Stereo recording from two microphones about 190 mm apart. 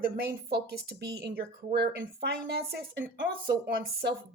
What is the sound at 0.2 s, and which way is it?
Speech, 60° right (ahead or behind).